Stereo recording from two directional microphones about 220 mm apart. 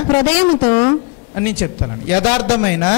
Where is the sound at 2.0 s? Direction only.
15° left (ahead or behind).